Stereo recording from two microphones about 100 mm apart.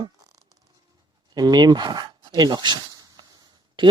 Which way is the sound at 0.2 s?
40° right (ahead or behind).